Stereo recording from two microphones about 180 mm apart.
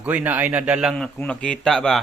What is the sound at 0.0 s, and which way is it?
A man's voice, 10° right (ahead or behind).